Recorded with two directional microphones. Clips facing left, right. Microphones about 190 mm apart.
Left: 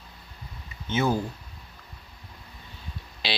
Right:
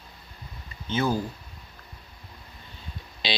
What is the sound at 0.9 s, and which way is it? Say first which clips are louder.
Speech: left 1 dB; 20° left (ahead or behind).